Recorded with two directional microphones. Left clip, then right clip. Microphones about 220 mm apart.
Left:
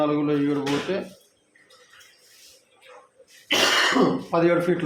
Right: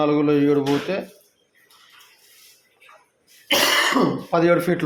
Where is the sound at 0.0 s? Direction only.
50° right (ahead or behind).